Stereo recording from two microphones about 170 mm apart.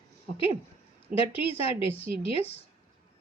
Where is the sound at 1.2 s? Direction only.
35° left (ahead or behind).